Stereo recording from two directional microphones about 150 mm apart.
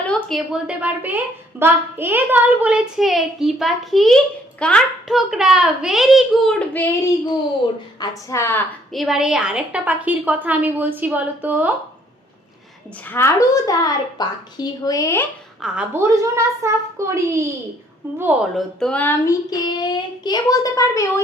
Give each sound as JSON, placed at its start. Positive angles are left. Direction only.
{"t": 0.0, "sound": "a woman's voice", "side_deg": 5}
{"t": 7.9, "sound": "child singing", "side_deg": 25}
{"t": 8.9, "sound": "a woman's voice", "side_deg": 0}
{"t": 13.1, "sound": "child singing", "side_deg": 15}
{"t": 15.6, "sound": "a woman's voice", "side_deg": -5}
{"t": 18.5, "sound": "child singing", "side_deg": 5}